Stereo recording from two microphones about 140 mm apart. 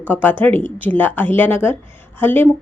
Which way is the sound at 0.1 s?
15° left (ahead or behind).